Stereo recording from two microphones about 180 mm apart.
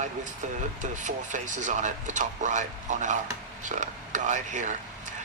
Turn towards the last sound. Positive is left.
turn(degrees=-40)  # may be behind; listen again after turning